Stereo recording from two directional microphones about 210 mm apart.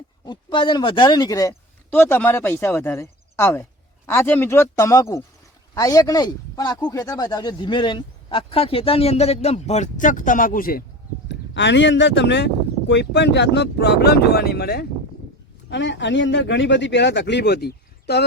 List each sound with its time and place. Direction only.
0.3 s speech: 20° left (ahead or behind); by 10.8 s 45° left (ahead or behind)
11.3 s speech: 60° left (ahead or behind)